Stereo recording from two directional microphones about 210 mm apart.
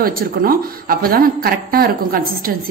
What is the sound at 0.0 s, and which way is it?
Speech, 45° right (ahead or behind).